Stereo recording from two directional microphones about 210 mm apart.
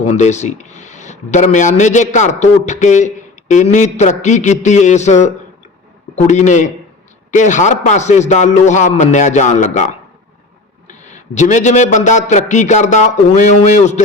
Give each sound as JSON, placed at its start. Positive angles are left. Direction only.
{"t": 0.0, "sound": "a man's voice", "side_deg": 35}